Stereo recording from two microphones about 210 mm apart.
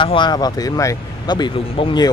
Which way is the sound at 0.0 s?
20° left (ahead or behind).